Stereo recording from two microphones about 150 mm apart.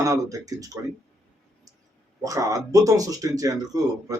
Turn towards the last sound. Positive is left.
turn(degrees=-25)  # may be behind; listen again after turning